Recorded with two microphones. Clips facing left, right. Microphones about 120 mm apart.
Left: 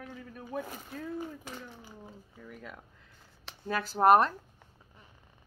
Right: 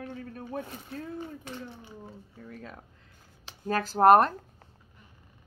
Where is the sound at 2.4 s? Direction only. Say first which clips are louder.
Right 2 dB; 35° right (ahead or behind).